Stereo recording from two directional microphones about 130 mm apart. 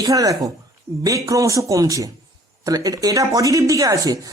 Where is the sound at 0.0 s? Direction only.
25° right (ahead or behind).